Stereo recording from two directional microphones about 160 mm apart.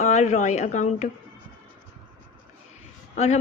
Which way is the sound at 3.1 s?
45° left (ahead or behind).